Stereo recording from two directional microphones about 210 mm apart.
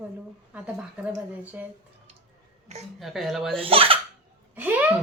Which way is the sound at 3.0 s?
Centre (ahead or behind).